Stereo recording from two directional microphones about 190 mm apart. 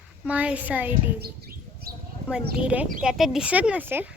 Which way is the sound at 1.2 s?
55° right (ahead or behind).